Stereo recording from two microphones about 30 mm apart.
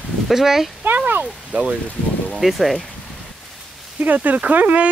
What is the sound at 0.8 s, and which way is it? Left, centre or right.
Speech, right.